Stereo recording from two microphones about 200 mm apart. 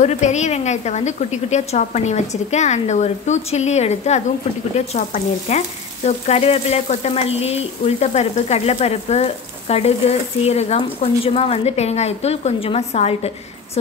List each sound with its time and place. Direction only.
0.0 s frying: 35° left (ahead or behind)